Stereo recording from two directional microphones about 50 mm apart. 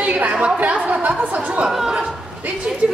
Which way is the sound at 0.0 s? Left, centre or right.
Right.